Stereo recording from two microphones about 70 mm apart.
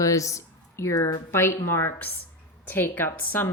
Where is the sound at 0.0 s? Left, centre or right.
Left.